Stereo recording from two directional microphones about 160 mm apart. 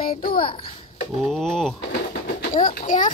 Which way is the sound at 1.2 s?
Centre (ahead or behind).